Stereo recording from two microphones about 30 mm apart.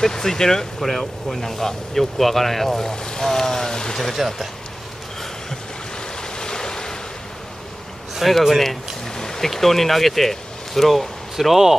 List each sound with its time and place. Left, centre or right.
0.0 s speech: centre
3.0 s speech: left
3.3 s speech: centre
4.2 s speech: centre
6.3 s waves: left
8.2 s speech: centre
9.1 s a sound: centre
9.5 s speech: centre
11.3 s speech: centre